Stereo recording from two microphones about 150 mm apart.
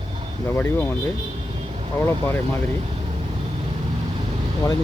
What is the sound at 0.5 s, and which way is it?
Speech, 15° left (ahead or behind).